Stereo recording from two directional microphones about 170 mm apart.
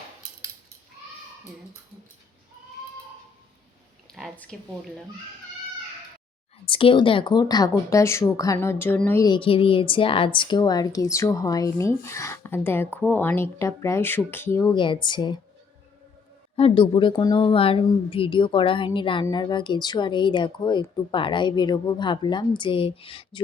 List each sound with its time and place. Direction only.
4.1 s a sound: 5° left (ahead or behind)
6.7 s speech: 30° left (ahead or behind); by 9.2 s 10° left (ahead or behind)
9.2 s speech: 30° left (ahead or behind)
14.8 s speech: 30° left (ahead or behind)
16.6 s speech: 30° left (ahead or behind)